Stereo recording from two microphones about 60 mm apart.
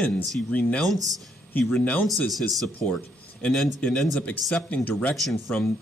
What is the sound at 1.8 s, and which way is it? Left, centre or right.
Speech, left.